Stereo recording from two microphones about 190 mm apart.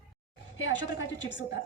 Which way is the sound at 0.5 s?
85° left.